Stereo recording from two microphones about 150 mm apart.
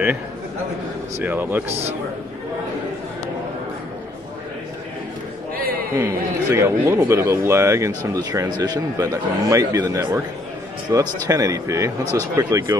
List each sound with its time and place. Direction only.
1.2 s speech: 15° right (ahead or behind)
5.5 s a sound: 80° right
5.9 s a man's voice: 15° right (ahead or behind)